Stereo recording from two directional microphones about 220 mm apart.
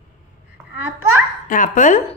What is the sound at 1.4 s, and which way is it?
Speech, 35° left (ahead or behind).